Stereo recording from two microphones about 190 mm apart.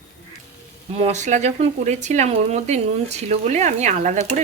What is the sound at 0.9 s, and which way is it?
Speech, 35° right (ahead or behind).